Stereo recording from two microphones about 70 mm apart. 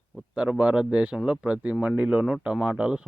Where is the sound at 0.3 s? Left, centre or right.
Centre.